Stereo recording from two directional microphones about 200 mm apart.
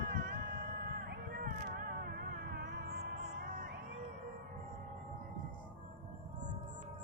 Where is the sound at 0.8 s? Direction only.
50° right (ahead or behind).